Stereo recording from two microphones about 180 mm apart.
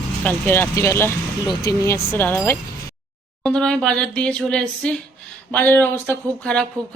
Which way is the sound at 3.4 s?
5° left (ahead or behind).